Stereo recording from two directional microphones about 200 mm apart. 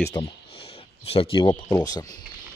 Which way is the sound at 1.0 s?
25° left (ahead or behind).